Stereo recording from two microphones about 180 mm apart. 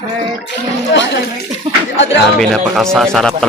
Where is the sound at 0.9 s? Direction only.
80° left.